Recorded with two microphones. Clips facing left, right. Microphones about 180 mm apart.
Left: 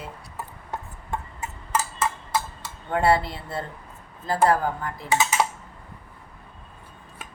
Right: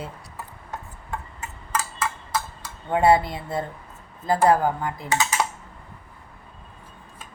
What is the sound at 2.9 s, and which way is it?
Speech, 20° right (ahead or behind).